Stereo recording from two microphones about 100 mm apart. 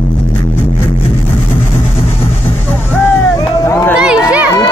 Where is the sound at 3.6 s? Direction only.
30° left (ahead or behind).